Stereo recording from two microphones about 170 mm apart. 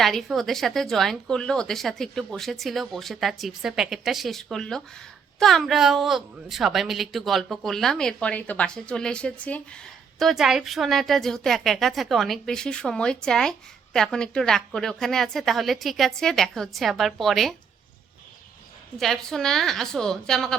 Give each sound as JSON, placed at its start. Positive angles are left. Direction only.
{"t": 0.0, "sound": "a woman's voice", "side_deg": 0}
{"t": 18.9, "sound": "a woman's voice", "side_deg": 0}